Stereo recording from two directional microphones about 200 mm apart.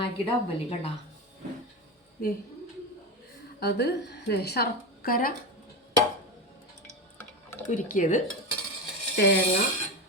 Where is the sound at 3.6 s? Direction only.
55° left (ahead or behind).